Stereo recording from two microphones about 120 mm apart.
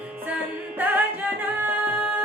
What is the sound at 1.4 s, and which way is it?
Music, 15° right (ahead or behind).